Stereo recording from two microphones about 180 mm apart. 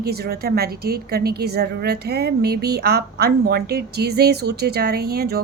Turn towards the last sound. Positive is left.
turn(degrees=-60)  # may be behind; listen again after turning